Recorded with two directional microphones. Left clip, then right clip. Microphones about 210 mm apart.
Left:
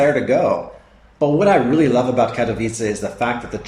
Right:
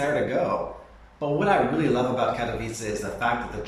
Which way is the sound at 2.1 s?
35° left (ahead or behind).